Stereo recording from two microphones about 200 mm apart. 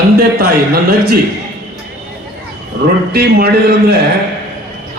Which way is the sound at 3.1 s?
50° right (ahead or behind).